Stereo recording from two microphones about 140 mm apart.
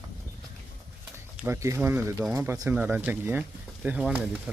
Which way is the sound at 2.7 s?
10° right (ahead or behind).